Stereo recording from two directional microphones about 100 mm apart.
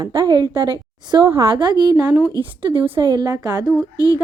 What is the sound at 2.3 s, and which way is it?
A woman's voice, 55° right (ahead or behind).